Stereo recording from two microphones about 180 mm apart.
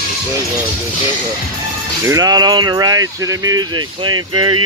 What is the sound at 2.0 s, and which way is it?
Speech, 20° right (ahead or behind).